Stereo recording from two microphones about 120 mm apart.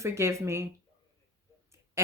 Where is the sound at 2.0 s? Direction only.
20° right (ahead or behind).